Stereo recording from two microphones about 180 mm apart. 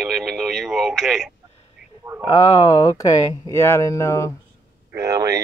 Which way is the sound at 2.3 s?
20° left (ahead or behind).